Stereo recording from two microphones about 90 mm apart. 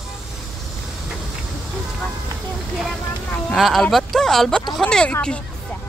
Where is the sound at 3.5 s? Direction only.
Centre (ahead or behind).